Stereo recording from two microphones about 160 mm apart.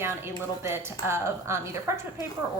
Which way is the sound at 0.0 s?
15° right (ahead or behind).